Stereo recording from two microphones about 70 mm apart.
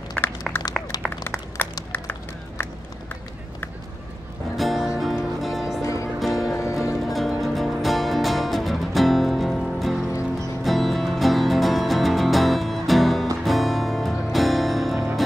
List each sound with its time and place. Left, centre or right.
0.2 s a sound: left
0.9 s a sound: left
1.9 s run: left
4.6 s music: centre
5.8 s music: left
6.1 s music: centre
6.5 s music: left
7.1 s music: centre